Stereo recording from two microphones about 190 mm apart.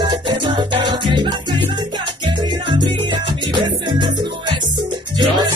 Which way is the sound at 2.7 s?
25° right (ahead or behind).